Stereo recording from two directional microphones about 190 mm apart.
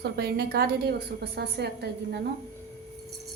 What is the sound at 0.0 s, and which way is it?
A woman's voice, 55° right (ahead or behind).